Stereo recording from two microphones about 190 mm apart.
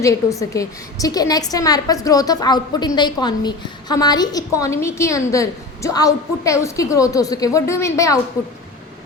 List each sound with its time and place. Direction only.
0.0 s a woman's voice: 15° left (ahead or behind)